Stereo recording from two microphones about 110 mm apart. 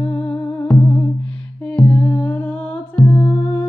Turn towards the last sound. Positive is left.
turn(degrees=15)  # may be behind; listen again after turning